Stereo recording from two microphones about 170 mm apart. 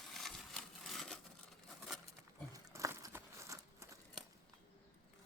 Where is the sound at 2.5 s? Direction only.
20° right (ahead or behind).